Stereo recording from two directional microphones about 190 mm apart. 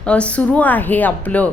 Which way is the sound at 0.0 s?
5° left (ahead or behind).